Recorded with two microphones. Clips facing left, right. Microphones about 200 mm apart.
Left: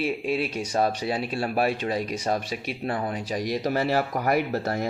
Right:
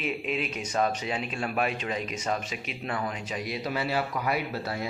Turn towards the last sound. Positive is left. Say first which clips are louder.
# left 6 dB
turn(degrees=45)  # may be behind; listen again after turning